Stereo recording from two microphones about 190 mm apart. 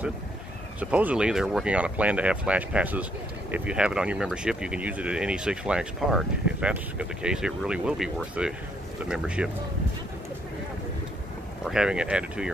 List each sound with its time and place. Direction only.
0.7 s speech: 5° right (ahead or behind)
11.6 s speech: 5° right (ahead or behind)